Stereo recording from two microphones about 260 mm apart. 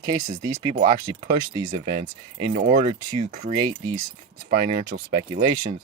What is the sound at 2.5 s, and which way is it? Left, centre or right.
Speech, right.